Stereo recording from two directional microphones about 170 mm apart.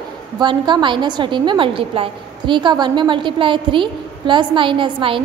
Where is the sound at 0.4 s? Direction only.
25° right (ahead or behind).